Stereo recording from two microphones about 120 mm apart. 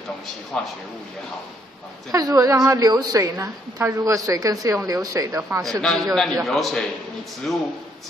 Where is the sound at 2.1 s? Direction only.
30° right (ahead or behind).